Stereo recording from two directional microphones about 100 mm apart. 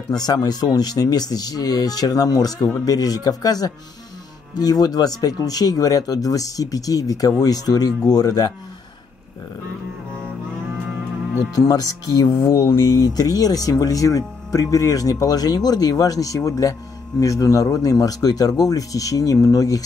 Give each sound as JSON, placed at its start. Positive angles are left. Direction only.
{"t": 0.1, "sound": "speech", "side_deg": 40}
{"t": 11.5, "sound": "speech", "side_deg": 40}